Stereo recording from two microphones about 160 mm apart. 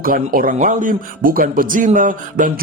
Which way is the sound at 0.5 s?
50° right (ahead or behind).